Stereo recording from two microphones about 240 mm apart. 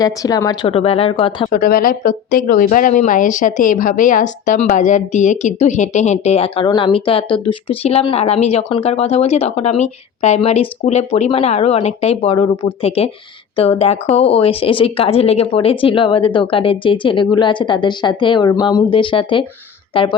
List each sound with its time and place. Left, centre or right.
0.0 s speech: centre
1.5 s speech: left